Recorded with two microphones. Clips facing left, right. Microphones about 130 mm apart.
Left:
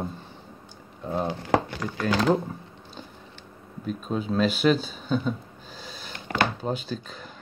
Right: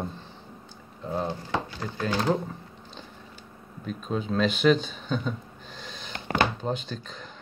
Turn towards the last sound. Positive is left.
turn(degrees=5)  # may be behind; listen again after turning